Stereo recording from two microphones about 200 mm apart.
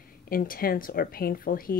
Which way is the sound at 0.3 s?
45° left (ahead or behind).